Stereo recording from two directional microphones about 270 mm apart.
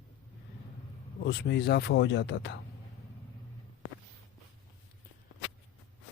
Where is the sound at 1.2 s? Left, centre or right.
Left.